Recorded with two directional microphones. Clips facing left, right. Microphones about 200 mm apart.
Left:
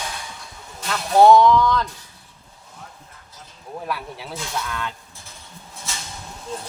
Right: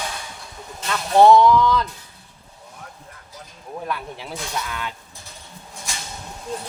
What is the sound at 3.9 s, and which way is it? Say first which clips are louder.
Speech: even; centre (ahead or behind).